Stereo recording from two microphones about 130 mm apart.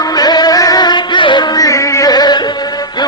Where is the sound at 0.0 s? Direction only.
30° left (ahead or behind).